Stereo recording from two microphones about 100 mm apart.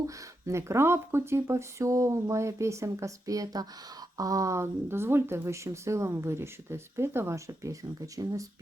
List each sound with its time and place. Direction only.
0.4 s speech: 30° right (ahead or behind)